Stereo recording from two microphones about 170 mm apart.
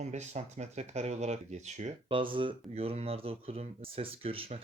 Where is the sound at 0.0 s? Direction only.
40° right (ahead or behind).